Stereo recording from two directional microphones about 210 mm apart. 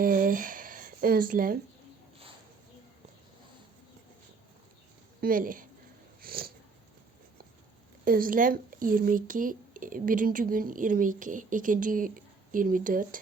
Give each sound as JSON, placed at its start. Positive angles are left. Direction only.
{"t": 0.0, "sound": "a sound", "side_deg": -40}
{"t": 5.2, "sound": "speech", "side_deg": -40}
{"t": 6.2, "sound": "sniff", "side_deg": -45}
{"t": 8.0, "sound": "speech", "side_deg": -40}